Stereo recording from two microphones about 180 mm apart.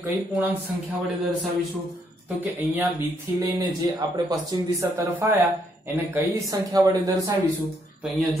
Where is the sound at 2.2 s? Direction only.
10° right (ahead or behind).